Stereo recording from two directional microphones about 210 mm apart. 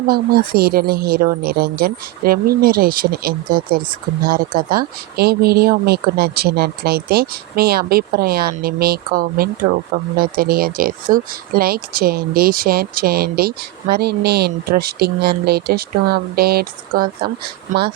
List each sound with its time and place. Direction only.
0.1 s speech: 45° right (ahead or behind)